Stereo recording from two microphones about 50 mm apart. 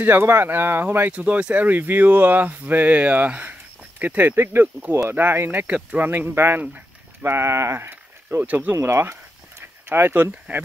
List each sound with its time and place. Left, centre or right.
0.0 s speech: right
1.1 s speech: right
4.5 s speech: right
6.6 s a sound: right
7.2 s speech: right
8.5 s speech: right
8.7 s a sound: right
9.8 s speech: right